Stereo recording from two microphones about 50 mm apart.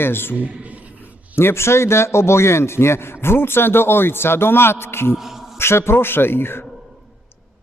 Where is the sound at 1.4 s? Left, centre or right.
Left.